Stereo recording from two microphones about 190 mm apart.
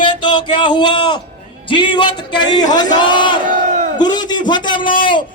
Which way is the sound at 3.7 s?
40° right (ahead or behind).